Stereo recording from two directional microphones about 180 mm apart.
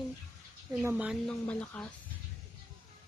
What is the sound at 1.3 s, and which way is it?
Speech, 5° left (ahead or behind).